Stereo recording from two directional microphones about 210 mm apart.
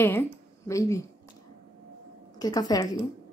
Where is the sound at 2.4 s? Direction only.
20° left (ahead or behind).